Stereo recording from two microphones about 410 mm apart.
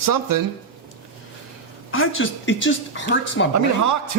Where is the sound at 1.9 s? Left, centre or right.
Left.